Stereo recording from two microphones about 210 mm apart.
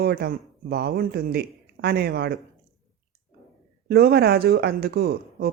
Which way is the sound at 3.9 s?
50° right (ahead or behind).